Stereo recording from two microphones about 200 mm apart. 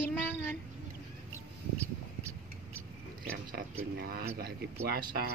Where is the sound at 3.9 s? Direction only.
50° right (ahead or behind).